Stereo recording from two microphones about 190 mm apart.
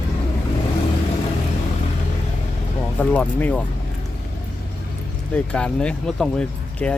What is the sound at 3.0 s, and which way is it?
Speech, 10° left (ahead or behind).